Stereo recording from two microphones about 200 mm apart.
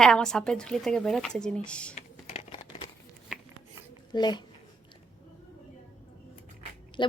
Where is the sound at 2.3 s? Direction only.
30° left (ahead or behind).